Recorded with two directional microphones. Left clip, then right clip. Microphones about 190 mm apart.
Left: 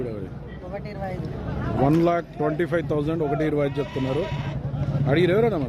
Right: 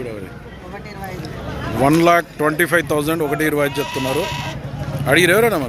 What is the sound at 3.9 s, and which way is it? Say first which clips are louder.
Speech: right 6 dB; 50° left (ahead or behind).